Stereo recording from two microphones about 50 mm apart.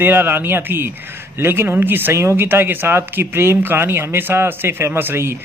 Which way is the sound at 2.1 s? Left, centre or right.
Right.